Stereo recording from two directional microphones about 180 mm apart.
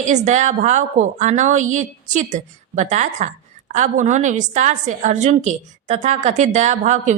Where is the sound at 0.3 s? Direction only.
40° right (ahead or behind).